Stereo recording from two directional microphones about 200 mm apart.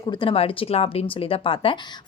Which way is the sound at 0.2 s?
25° left (ahead or behind).